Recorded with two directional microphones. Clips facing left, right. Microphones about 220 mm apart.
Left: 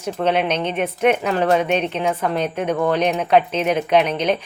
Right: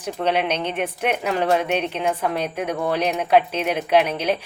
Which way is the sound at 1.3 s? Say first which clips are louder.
Left 3 dB; 55° left (ahead or behind).